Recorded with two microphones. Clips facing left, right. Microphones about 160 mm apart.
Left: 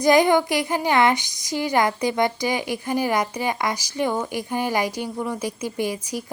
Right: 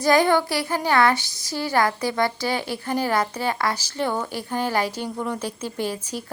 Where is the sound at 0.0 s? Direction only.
15° left (ahead or behind).